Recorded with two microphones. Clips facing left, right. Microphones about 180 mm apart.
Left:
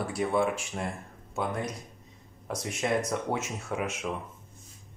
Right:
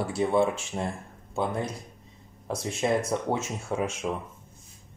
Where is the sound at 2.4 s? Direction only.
30° right (ahead or behind).